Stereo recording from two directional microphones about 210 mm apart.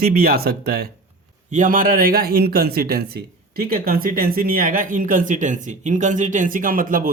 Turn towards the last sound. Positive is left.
turn(degrees=-40)  # may be behind; listen again after turning